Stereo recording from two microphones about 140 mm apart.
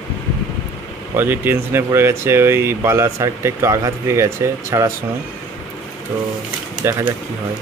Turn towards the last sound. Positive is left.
turn(degrees=-20)  # may be behind; listen again after turning